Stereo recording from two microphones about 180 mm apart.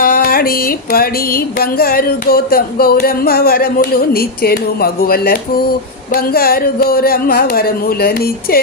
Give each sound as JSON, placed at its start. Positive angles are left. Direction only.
{"t": 0.0, "sound": "music", "side_deg": 55}